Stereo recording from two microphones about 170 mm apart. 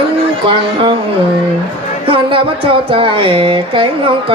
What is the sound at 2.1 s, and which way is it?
Speech, 30° right (ahead or behind).